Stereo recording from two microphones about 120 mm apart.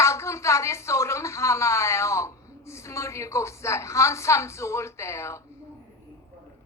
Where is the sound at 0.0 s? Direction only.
25° left (ahead or behind).